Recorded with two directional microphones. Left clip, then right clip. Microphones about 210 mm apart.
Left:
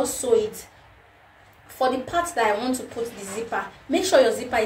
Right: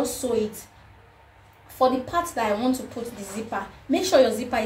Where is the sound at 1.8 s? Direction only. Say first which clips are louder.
Right 1 dB; 10° right (ahead or behind).